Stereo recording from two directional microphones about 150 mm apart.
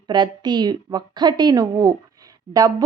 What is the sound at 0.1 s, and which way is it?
A woman's voice, 30° right (ahead or behind).